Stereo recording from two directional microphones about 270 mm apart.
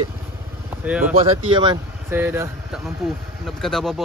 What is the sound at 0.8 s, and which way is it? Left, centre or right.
Speech, centre.